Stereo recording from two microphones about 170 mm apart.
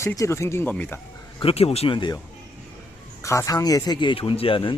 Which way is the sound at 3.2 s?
15° left (ahead or behind).